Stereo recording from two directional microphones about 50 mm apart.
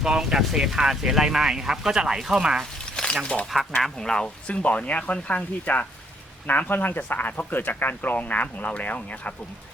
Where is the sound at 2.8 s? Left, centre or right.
Centre.